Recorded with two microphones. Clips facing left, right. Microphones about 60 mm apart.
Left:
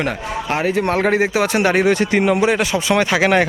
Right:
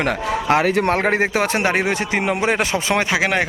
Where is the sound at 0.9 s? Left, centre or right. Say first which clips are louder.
Left 1 dB; right.